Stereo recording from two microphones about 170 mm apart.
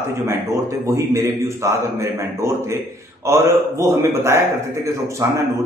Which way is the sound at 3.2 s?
15° right (ahead or behind).